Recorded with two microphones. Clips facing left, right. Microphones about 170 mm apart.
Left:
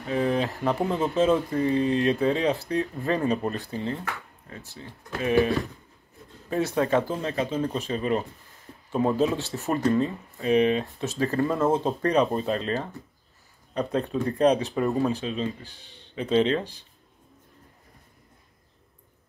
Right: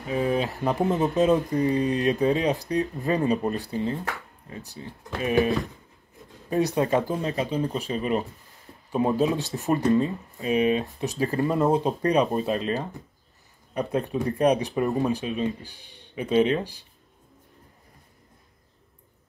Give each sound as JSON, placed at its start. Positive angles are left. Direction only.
{"t": 0.1, "sound": "a sound", "side_deg": -10}
{"t": 0.7, "sound": "speech", "side_deg": -15}
{"t": 6.5, "sound": "speech", "side_deg": -15}